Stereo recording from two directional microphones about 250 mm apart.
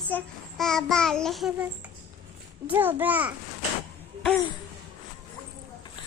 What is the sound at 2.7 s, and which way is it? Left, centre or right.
Speech, centre.